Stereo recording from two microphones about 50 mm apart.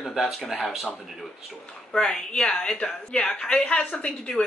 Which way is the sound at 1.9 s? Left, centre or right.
Centre.